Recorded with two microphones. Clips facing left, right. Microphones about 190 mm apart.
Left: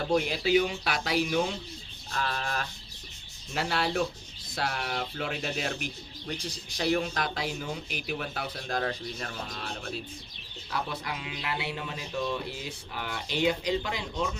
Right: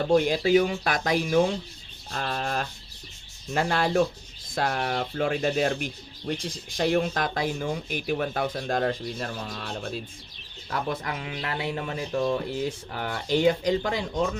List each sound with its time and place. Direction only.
0.3 s speech: 45° right (ahead or behind)
10.7 s speech: 45° right (ahead or behind)